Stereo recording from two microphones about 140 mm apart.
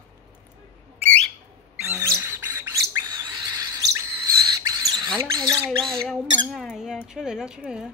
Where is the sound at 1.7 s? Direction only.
15° right (ahead or behind).